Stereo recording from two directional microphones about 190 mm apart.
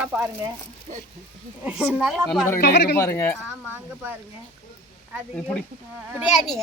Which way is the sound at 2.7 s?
65° left (ahead or behind).